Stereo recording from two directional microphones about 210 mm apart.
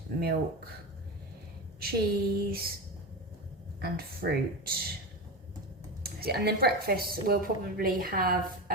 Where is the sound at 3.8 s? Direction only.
45° right (ahead or behind).